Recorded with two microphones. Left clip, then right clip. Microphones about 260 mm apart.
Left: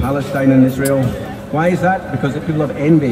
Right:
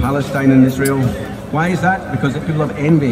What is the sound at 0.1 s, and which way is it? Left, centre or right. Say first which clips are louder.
Speech: left 1 dB; right.